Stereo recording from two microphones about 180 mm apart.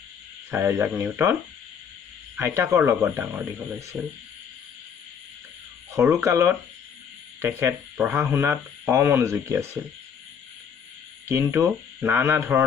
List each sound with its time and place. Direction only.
0.5 s speech: 10° right (ahead or behind)
2.3 s speech: 15° right (ahead or behind)
5.9 s speech: 15° right (ahead or behind)
11.2 s speech: 15° right (ahead or behind)